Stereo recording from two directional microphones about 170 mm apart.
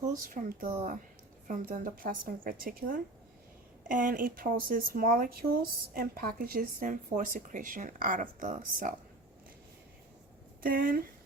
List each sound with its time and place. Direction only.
0.0 s a woman's voice: 50° right (ahead or behind)
10.6 s speech: 55° right (ahead or behind)